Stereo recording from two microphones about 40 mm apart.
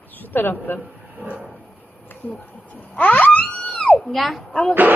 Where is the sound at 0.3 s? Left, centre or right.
Left.